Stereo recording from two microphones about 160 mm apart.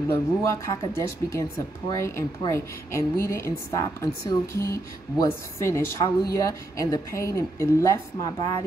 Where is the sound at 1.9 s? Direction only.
15° left (ahead or behind).